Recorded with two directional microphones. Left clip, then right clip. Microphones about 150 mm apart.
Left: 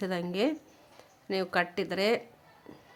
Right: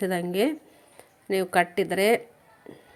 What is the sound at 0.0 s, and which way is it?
A woman's voice, 15° right (ahead or behind).